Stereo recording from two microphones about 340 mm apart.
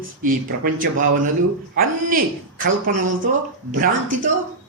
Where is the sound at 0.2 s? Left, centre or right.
Right.